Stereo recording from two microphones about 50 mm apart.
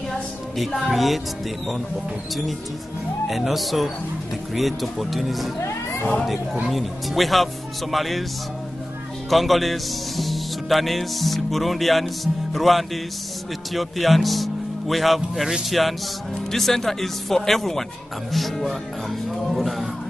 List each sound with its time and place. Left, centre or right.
0.6 s speech: centre
3.3 s speech: centre
5.6 s a sound: left
6.7 s speech: centre
9.3 s a man's voice: centre